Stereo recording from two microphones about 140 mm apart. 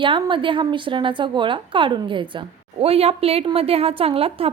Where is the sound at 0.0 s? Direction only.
35° right (ahead or behind).